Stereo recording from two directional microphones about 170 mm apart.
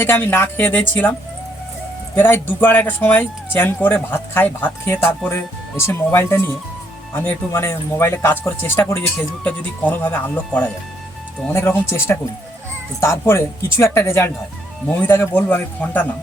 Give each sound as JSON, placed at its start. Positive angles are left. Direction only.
{"t": 0.0, "sound": "speech", "side_deg": 15}
{"t": 2.1, "sound": "speech", "side_deg": 10}